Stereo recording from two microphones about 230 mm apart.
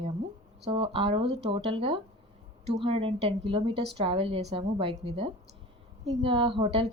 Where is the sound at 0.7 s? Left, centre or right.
Right.